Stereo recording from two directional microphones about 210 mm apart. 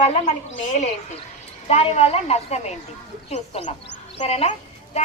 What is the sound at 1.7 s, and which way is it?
A woman's voice, 30° left (ahead or behind).